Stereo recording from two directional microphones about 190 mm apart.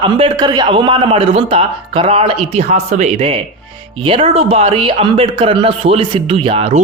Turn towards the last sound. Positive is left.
turn(degrees=-30)  # may be behind; listen again after turning